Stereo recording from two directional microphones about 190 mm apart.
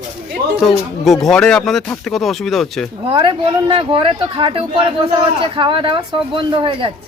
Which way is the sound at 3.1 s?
25° right (ahead or behind).